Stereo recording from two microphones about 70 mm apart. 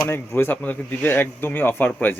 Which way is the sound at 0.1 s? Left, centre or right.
Left.